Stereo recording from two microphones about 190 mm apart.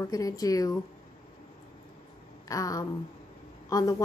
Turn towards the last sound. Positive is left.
turn(degrees=20)  # may be behind; listen again after turning